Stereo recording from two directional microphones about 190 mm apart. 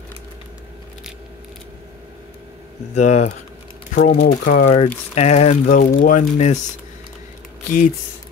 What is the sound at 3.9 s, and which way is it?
Speech, 55° left (ahead or behind).